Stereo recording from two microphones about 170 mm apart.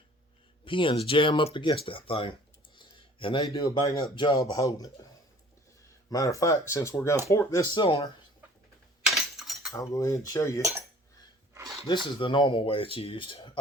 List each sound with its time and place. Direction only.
0.6 s speech: 30° left (ahead or behind)
6.1 s speech: 20° left (ahead or behind)
9.0 s a sound: centre (ahead or behind)
9.7 s speech: 20° left (ahead or behind)
10.6 s speech: 15° right (ahead or behind)
12.2 s speech: 30° left (ahead or behind)